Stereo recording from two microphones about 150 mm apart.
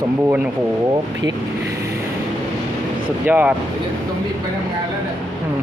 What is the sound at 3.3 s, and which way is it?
Speech, 10° right (ahead or behind).